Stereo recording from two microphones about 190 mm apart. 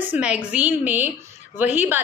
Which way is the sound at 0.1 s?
5° right (ahead or behind).